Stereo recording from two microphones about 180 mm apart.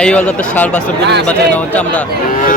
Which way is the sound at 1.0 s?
75° right (ahead or behind).